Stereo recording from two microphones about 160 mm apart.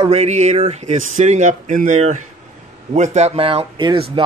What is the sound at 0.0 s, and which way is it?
Speech, 40° right (ahead or behind).